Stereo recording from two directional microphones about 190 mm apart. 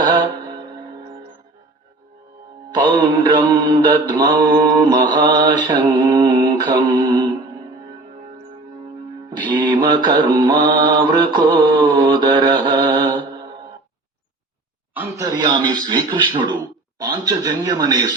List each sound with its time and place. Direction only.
0.0 s music: 25° right (ahead or behind)
2.6 s mantra: 25° right (ahead or behind)
9.4 s music: 25° right (ahead or behind)
9.8 s mantra: 25° right (ahead or behind)
14.9 s mantra: 15° right (ahead or behind)